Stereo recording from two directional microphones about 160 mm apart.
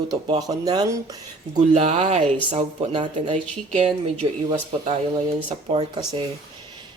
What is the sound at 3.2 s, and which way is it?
Speech, 45° right (ahead or behind).